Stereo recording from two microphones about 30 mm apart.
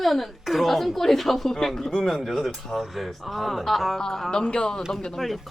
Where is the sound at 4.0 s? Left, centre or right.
Left.